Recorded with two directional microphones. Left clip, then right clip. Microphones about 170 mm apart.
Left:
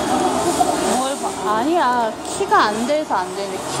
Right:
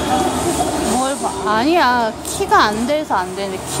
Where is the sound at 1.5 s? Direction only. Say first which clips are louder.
Right 3 dB; 10° right (ahead or behind).